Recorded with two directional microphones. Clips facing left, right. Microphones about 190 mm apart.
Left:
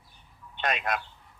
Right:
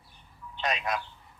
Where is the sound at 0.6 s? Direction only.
55° left (ahead or behind).